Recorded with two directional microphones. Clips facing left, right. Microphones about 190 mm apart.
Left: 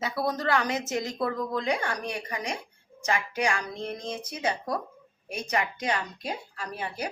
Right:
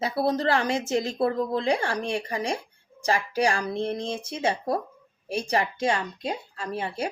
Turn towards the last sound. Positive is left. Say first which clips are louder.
# right 4 dB
turn(degrees=-25)  # may be behind; listen again after turning